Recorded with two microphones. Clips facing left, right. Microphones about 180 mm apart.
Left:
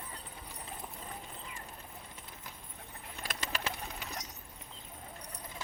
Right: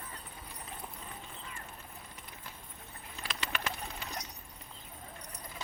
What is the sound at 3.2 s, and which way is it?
Bird, 45° left (ahead or behind).